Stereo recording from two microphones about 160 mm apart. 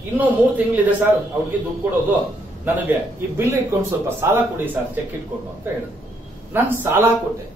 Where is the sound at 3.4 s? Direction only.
15° right (ahead or behind).